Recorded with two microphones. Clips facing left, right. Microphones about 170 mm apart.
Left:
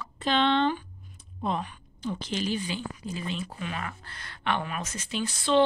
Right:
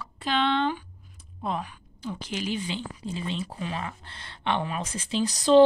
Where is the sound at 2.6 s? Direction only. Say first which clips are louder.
Right 1 dB; 25° right (ahead or behind).